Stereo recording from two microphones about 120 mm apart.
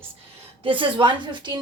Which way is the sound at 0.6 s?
45° right (ahead or behind).